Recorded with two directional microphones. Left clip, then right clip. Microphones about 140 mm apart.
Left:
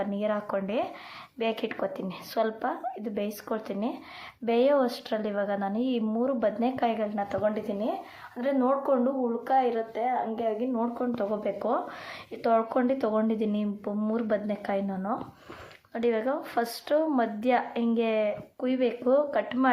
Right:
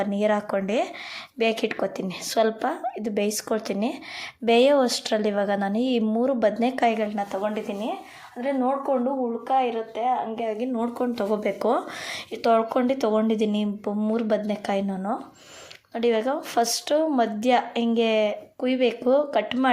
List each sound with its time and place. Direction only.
0.0 s a woman's voice: 45° right (ahead or behind)
8.4 s speech: 10° right (ahead or behind)
10.6 s a woman's voice: 30° right (ahead or behind); by 11.8 s 50° right (ahead or behind)
12.4 s a woman's voice: 30° right (ahead or behind)